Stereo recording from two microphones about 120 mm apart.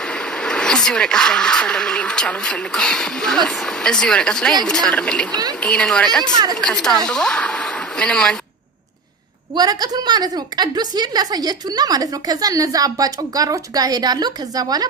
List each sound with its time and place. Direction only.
0.0 s speech: 5° left (ahead or behind)
9.6 s a woman's voice: 35° right (ahead or behind)